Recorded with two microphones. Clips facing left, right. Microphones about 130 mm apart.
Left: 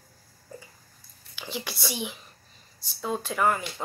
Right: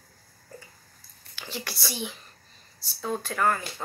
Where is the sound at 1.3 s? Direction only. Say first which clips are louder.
Left 2 dB; 15° left (ahead or behind).